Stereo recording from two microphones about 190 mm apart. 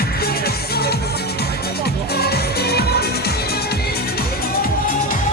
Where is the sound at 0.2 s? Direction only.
55° left (ahead or behind).